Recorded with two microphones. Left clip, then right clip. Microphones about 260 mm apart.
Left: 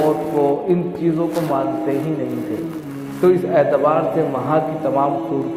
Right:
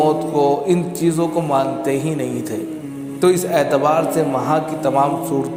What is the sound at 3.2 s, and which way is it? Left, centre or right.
A man's voice, right.